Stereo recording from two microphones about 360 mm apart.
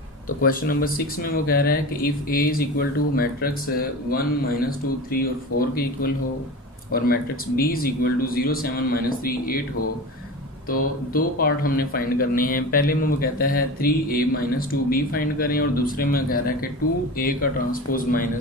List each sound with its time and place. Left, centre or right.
0.4 s speech: left
5.5 s speech: left
6.9 s speech: left
10.7 s speech: left